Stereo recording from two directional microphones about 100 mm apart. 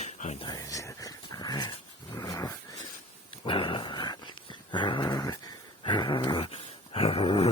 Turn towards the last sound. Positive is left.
turn(degrees=70)  # may be behind; listen again after turning